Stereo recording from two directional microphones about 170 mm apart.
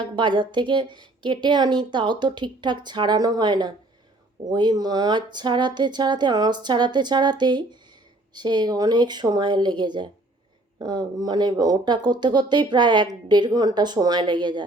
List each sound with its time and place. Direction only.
0.0 s speech: 25° right (ahead or behind)